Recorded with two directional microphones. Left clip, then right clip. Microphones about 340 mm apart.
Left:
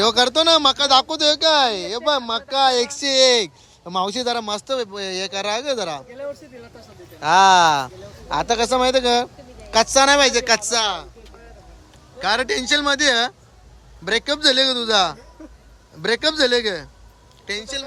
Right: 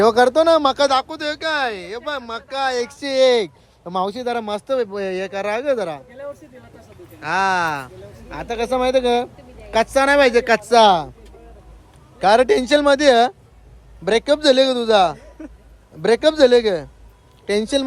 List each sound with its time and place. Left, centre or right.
0.0 s speech: centre
7.2 s speech: centre
12.2 s speech: centre
15.4 s a sound: right
16.0 s speech: centre